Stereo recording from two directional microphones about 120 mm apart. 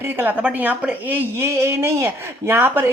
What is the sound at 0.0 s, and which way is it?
A woman's voice, 15° right (ahead or behind).